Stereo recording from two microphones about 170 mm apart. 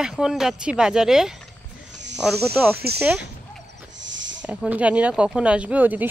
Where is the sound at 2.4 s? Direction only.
15° right (ahead or behind).